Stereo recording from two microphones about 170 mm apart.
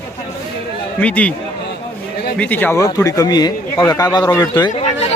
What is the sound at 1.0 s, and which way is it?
Speech, 10° left (ahead or behind).